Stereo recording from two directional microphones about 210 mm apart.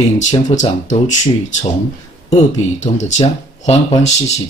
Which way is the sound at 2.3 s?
35° left (ahead or behind).